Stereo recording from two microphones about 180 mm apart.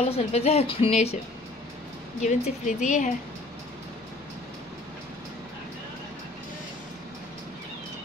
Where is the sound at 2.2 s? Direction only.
45° left (ahead or behind).